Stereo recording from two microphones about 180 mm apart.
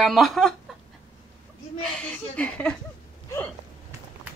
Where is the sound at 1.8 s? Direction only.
5° left (ahead or behind).